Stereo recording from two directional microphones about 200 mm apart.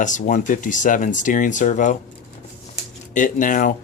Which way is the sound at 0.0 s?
40° left (ahead or behind).